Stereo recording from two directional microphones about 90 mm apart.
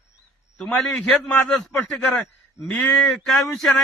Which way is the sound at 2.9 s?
10° left (ahead or behind).